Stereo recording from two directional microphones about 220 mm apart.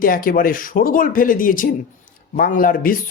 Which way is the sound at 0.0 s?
40° left (ahead or behind).